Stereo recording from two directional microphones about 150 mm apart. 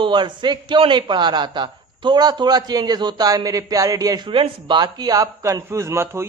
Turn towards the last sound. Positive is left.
turn(degrees=-20)  # may be behind; listen again after turning